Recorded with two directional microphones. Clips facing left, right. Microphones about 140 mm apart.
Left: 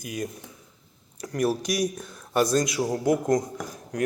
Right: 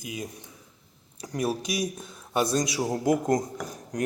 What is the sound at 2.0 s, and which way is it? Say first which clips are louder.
A man's voice: left 3 dB; 30° right (ahead or behind).